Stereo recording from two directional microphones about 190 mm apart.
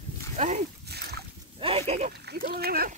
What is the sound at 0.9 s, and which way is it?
Splash, 60° right (ahead or behind).